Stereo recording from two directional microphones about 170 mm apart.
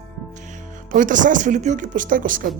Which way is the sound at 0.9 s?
50° right (ahead or behind).